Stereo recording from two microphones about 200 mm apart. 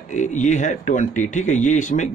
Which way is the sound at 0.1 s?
35° left (ahead or behind).